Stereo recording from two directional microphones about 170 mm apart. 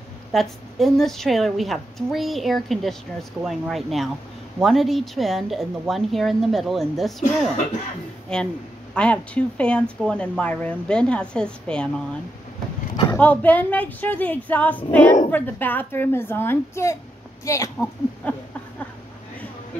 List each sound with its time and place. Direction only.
0.3 s a woman's voice: centre (ahead or behind)